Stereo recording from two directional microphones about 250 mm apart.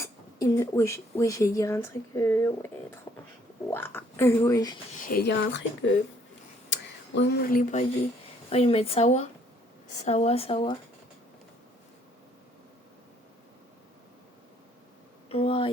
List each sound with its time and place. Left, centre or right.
0.0 s speech: centre
4.9 s speech: left
6.7 s speech: left
15.3 s a sound: left